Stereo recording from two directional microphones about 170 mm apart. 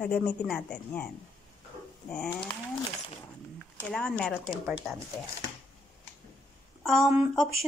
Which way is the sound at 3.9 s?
5° left (ahead or behind).